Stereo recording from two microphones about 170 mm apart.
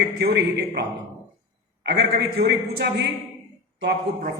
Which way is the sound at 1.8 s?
80° right.